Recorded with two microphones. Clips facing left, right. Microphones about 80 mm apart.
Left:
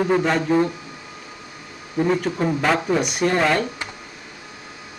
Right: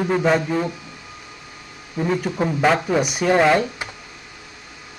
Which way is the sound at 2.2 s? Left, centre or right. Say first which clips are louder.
Right 1 dB; centre.